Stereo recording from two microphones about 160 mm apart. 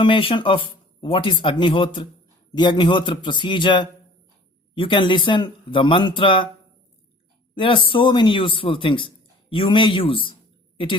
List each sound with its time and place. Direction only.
0.0 s a man's voice: 35° left (ahead or behind)
7.5 s speech: 30° left (ahead or behind)